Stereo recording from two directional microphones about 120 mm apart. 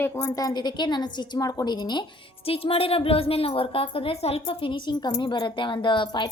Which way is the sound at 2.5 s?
50° left (ahead or behind).